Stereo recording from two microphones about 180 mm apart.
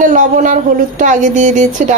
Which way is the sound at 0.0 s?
45° right (ahead or behind).